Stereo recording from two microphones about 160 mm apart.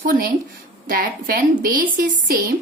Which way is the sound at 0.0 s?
60° right (ahead or behind).